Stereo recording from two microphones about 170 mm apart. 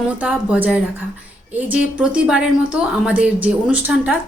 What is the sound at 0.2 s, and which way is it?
A woman's voice, 10° right (ahead or behind).